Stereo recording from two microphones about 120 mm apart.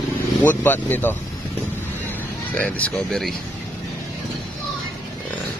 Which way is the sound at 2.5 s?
10° left (ahead or behind).